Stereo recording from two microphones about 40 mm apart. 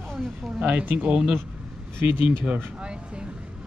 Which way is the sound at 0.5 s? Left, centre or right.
Right.